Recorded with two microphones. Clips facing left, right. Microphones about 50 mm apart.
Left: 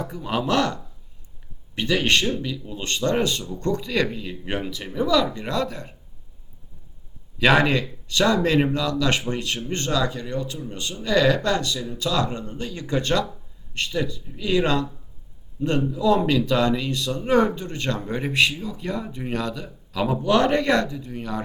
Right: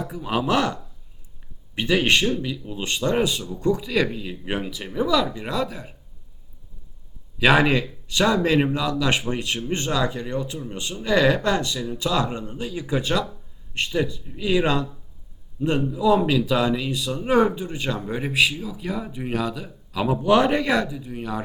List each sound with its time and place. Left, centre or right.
0.0 s speech: centre
7.3 s speech: centre
13.7 s speech: centre